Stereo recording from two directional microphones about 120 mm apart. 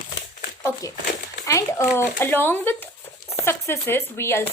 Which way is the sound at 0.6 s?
30° left (ahead or behind).